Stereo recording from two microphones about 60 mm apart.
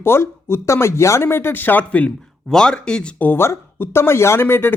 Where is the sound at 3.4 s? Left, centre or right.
Left.